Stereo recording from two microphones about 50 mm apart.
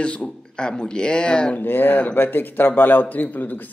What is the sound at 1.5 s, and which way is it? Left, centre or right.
Speech, left.